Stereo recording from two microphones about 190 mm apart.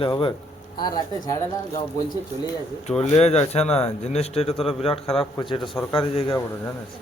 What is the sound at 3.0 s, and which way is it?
A man's voice, 35° left (ahead or behind).